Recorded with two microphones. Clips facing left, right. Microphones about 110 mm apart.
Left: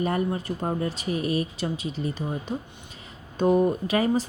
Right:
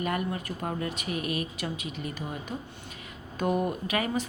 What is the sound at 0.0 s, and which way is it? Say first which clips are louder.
A woman's voice: left 5 dB; 30° left (ahead or behind).